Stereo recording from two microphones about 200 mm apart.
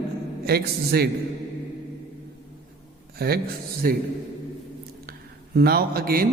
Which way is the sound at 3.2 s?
50° right (ahead or behind).